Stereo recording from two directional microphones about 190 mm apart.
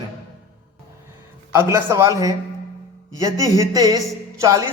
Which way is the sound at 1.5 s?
15° right (ahead or behind).